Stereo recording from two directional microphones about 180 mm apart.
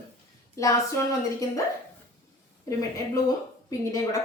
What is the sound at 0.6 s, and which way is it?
A woman's voice, 15° left (ahead or behind).